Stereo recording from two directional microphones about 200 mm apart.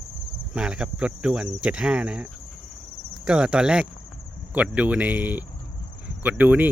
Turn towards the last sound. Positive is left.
turn(degrees=-10)  # may be behind; listen again after turning